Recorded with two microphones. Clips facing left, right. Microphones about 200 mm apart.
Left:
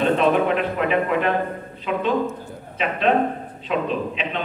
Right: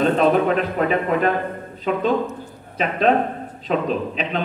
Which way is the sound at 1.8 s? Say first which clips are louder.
Right 3 dB; 40° right (ahead or behind).